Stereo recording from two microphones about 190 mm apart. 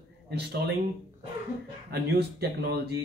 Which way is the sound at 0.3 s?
60° right (ahead or behind).